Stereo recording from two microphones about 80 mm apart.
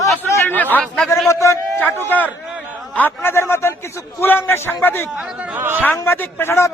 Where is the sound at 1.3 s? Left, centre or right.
Left.